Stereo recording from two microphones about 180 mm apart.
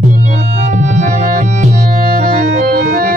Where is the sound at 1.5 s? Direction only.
50° right (ahead or behind).